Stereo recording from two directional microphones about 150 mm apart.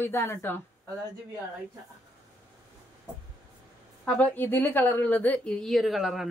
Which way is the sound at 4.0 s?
10° left (ahead or behind).